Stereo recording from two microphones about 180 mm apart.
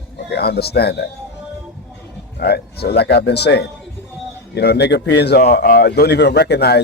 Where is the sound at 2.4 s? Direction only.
65° left (ahead or behind).